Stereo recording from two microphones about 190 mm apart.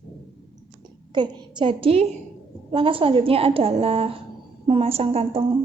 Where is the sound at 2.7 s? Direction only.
30° right (ahead or behind).